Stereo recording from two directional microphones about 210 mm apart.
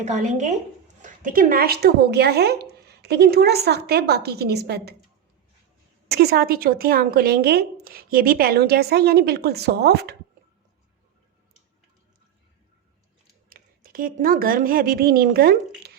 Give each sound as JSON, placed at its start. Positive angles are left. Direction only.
{"t": 0.0, "sound": "a woman's voice", "side_deg": -35}
{"t": 6.1, "sound": "a woman's voice", "side_deg": -50}
{"t": 13.5, "sound": "speech", "side_deg": -45}